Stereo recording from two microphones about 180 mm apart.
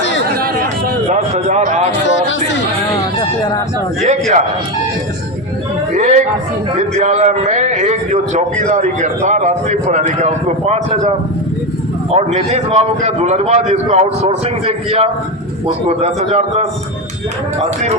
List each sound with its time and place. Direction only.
0.3 s chatter: 60° right (ahead or behind)
1.1 s a man's voice: 40° right (ahead or behind)
1.9 s speech: 85° left
4.0 s a man's voice: 40° right (ahead or behind)
5.9 s a man's voice: 45° right (ahead or behind)
12.1 s a man's voice: 35° right (ahead or behind)